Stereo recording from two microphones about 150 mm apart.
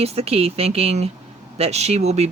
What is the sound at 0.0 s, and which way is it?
Speech, 45° right (ahead or behind).